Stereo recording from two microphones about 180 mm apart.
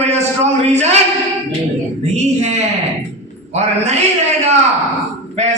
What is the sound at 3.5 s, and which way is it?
Speech, 35° right (ahead or behind).